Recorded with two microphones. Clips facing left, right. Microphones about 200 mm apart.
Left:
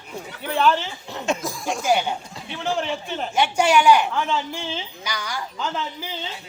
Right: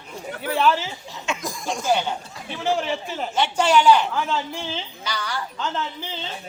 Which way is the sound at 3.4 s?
10° left (ahead or behind).